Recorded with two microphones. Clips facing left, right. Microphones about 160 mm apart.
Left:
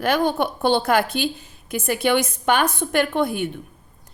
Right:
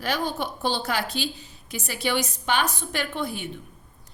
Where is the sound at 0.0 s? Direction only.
55° left (ahead or behind).